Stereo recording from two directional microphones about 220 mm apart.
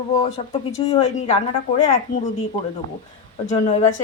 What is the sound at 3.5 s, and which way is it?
Speech, 30° left (ahead or behind).